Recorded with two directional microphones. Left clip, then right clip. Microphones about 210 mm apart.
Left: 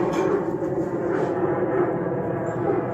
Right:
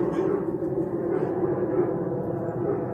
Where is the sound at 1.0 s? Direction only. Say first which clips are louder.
Left 3 dB; 15° left (ahead or behind).